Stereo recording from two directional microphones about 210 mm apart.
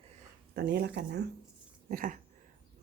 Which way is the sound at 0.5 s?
50° right (ahead or behind).